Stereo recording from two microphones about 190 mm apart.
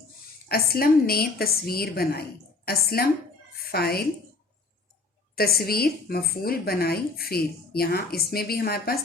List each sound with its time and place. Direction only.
0.4 s a woman's voice: 55° left (ahead or behind)
5.3 s a woman's voice: 55° left (ahead or behind)